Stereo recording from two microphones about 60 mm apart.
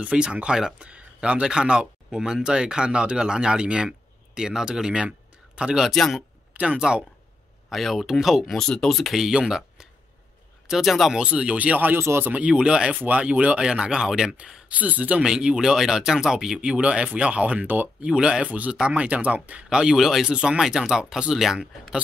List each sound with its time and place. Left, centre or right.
0.0 s speech: centre
5.9 s speech: centre
6.5 s speech: right
7.7 s speech: centre
8.5 s speech: centre
11.1 s speech: centre
12.0 s speech: right
12.3 s speech: right
15.2 s speech: centre; by 17.8 s right
18.0 s speech: centre
19.7 s speech: centre